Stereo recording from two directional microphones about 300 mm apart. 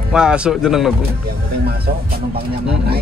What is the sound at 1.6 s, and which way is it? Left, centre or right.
Speech, right.